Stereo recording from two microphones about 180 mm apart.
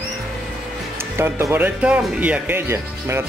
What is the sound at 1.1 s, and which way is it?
Speech, 15° right (ahead or behind).